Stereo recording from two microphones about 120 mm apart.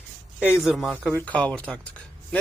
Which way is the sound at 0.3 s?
10° right (ahead or behind).